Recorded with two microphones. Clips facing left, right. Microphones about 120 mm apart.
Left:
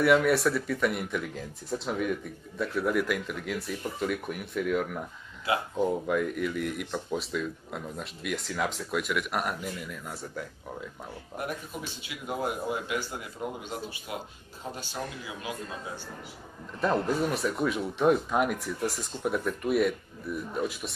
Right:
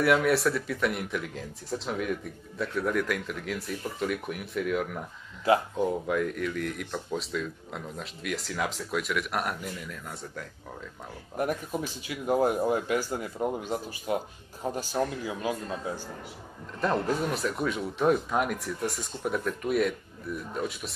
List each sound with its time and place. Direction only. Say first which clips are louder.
0.0 s speech: left 1 dB; centre (ahead or behind)
5.5 s speech: right 6 dB; 40° right (ahead or behind)
5.8 s speech: even; centre (ahead or behind)
11.3 s speech: right 6 dB; 40° right (ahead or behind)
16.8 s speech: left 1 dB; centre (ahead or behind)